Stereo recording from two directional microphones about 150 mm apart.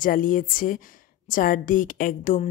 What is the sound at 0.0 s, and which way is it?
A woman's voice, 65° left (ahead or behind).